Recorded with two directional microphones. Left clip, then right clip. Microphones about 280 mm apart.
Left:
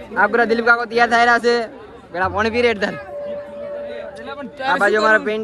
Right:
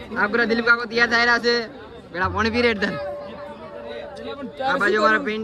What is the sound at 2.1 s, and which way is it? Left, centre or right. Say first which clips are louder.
Speech: left 3 dB; centre.